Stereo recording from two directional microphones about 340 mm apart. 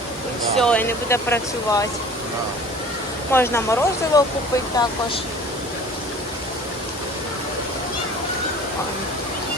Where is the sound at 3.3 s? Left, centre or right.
Centre.